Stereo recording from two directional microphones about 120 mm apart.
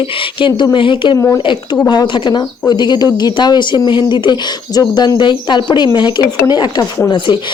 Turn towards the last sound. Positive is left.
turn(degrees=35)  # may be behind; listen again after turning